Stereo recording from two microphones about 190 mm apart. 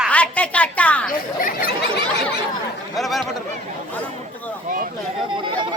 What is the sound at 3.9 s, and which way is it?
Chatter, 10° left (ahead or behind).